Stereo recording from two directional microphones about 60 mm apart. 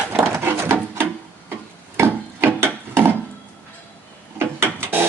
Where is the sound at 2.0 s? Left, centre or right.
Right.